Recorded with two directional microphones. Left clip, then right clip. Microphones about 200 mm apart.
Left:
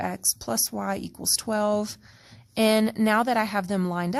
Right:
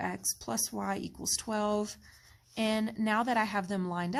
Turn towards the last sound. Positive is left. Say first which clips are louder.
# left 6 dB
turn(degrees=35)  # may be behind; listen again after turning